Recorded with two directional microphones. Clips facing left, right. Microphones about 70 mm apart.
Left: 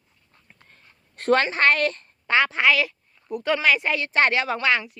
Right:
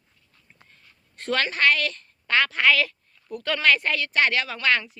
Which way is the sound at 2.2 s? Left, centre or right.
Left.